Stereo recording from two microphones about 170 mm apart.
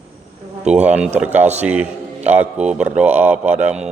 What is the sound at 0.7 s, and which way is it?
A man's voice, 5° right (ahead or behind).